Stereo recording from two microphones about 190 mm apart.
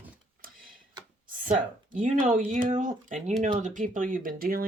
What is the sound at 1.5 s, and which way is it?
Speech, 45° right (ahead or behind).